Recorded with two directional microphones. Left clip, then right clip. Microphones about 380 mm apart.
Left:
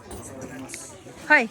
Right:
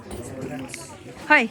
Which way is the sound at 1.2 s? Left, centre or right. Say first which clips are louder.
Right 1 dB; centre.